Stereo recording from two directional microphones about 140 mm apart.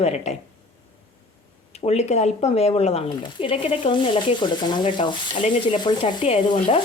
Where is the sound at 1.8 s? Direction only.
50° left (ahead or behind).